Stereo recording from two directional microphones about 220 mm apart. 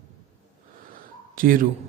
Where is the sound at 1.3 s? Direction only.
40° right (ahead or behind).